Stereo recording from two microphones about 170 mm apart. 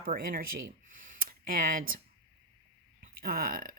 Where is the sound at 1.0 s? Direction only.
55° right (ahead or behind).